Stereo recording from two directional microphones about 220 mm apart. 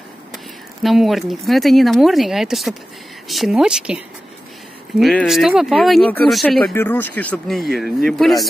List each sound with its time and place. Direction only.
0.8 s speech: centre (ahead or behind)